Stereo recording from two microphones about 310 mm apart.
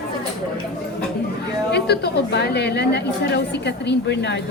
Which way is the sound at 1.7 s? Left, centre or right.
Left.